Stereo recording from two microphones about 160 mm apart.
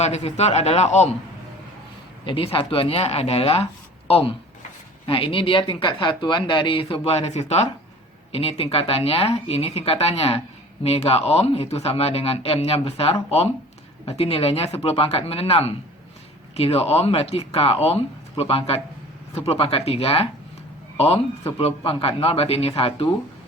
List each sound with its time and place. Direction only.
0.0 s speech: 45° left (ahead or behind)
2.2 s speech: 35° left (ahead or behind)
5.0 s speech: 35° left (ahead or behind)
21.6 s speech: 35° left (ahead or behind)